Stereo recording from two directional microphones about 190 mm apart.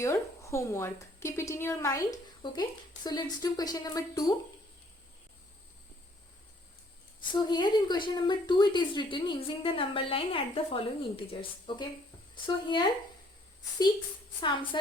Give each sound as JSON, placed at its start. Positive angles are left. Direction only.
{"t": 0.0, "sound": "a woman's voice", "side_deg": 15}
{"t": 7.2, "sound": "speech", "side_deg": 25}
{"t": 14.4, "sound": "speech", "side_deg": 25}